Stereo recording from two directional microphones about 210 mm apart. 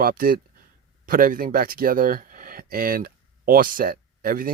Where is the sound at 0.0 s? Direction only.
45° right (ahead or behind).